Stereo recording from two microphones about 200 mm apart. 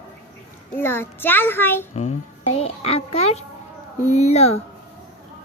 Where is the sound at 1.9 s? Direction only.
35° left (ahead or behind).